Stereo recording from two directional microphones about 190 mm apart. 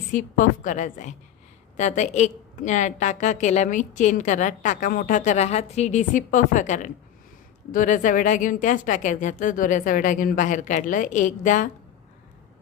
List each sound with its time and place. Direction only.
0.1 s a woman's voice: 45° left (ahead or behind)